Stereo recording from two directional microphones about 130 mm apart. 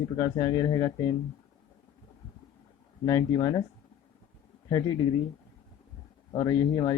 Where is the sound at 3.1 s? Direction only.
30° left (ahead or behind).